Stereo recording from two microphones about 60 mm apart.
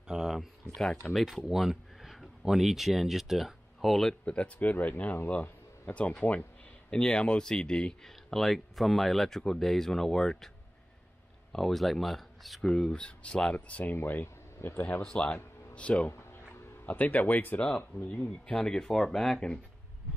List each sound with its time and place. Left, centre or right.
0.1 s a sound: centre
0.7 s speech: centre
1.1 s speech: centre
4.3 s speech: left
5.3 s a sound: left
5.9 s speech: left
6.9 s speech: centre
11.5 s speech: centre
13.8 s speech: left
15.0 s speech: centre